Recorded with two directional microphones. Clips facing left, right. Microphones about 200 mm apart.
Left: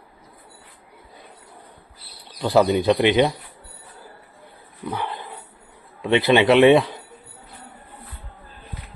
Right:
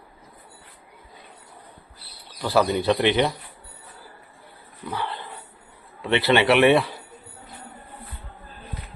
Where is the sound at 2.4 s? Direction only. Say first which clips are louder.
Left 4 dB; 20° left (ahead or behind).